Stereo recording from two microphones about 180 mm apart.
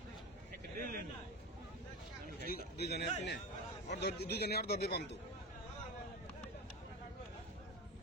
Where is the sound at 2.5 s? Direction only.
65° left (ahead or behind).